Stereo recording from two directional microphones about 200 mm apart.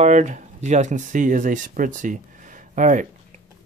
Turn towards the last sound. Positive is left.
turn(degrees=-40)  # may be behind; listen again after turning